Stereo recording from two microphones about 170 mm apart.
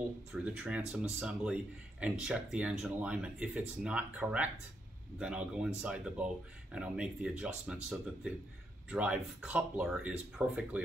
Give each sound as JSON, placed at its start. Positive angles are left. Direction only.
{"t": 0.3, "sound": "speech", "side_deg": -5}